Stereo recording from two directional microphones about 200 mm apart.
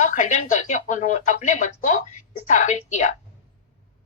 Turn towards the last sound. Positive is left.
turn(degrees=40)  # may be behind; listen again after turning